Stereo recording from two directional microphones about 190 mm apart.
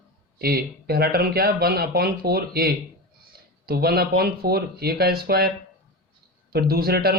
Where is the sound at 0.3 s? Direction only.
55° right (ahead or behind).